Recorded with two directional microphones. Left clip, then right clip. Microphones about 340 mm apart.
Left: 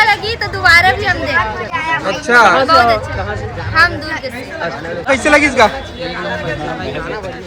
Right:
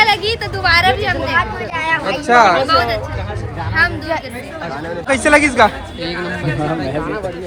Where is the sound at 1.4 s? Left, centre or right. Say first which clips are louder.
Left 1 dB; right.